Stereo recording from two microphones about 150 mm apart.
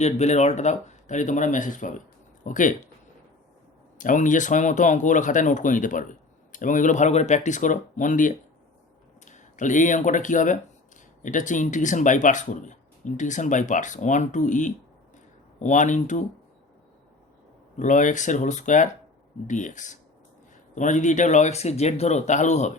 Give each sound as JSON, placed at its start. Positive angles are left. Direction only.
{"t": 0.0, "sound": "speech", "side_deg": 50}
{"t": 3.9, "sound": "speech", "side_deg": 60}
{"t": 17.7, "sound": "speech", "side_deg": 55}